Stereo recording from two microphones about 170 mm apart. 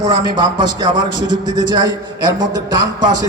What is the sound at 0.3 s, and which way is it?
A man's voice, 25° right (ahead or behind).